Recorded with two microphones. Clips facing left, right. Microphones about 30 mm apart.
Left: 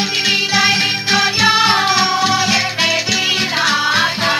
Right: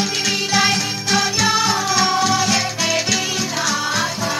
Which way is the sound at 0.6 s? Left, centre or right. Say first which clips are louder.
Left 4 dB; left.